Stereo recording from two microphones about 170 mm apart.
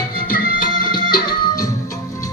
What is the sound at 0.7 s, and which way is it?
Music, 25° left (ahead or behind).